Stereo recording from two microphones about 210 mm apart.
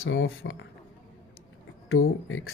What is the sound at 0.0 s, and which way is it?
Speech, 70° left (ahead or behind).